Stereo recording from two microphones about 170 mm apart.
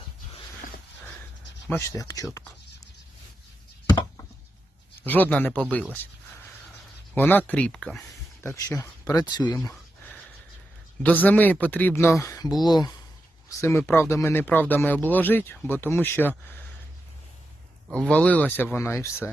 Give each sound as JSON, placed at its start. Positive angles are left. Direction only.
{"t": 2.0, "sound": "speech", "side_deg": 20}
{"t": 5.0, "sound": "speech", "side_deg": 10}
{"t": 5.9, "sound": "a sound", "side_deg": 10}
{"t": 7.2, "sound": "speech", "side_deg": 10}
{"t": 7.9, "sound": "speech", "side_deg": 15}
{"t": 11.0, "sound": "speech", "side_deg": 10}
{"t": 17.9, "sound": "speech", "side_deg": 5}